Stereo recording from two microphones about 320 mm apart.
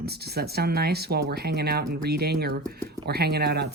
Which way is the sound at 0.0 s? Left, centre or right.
Right.